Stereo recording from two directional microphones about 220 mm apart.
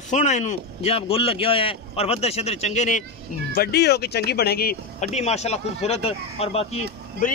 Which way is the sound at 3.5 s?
45° left (ahead or behind).